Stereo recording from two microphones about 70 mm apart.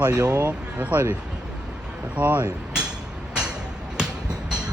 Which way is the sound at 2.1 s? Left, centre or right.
Right.